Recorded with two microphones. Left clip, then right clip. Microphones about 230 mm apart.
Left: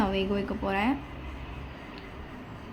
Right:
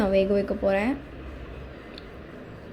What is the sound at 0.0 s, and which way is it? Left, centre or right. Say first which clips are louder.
Speech: right 7 dB; centre.